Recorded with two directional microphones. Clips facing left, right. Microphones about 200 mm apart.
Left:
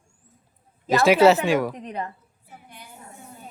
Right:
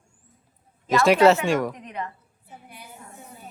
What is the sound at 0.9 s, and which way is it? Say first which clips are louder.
Speech: left 1 dB; centre (ahead or behind).